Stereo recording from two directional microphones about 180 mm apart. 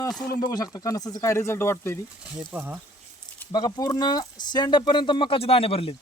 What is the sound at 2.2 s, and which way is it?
Speech, 5° right (ahead or behind).